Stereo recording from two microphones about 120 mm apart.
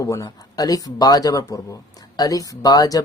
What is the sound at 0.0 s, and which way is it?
Speech, 25° left (ahead or behind).